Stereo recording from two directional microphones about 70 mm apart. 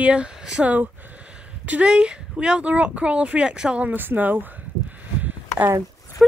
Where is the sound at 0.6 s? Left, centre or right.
Right.